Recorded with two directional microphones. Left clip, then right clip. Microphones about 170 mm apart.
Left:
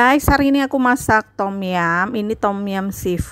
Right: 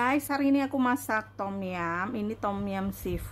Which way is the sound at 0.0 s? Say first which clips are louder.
Left 13 dB; 50° left (ahead or behind).